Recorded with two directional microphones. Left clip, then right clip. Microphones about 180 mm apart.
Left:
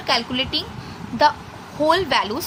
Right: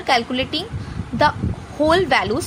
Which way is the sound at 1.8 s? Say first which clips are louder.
Right 2 dB; 20° right (ahead or behind).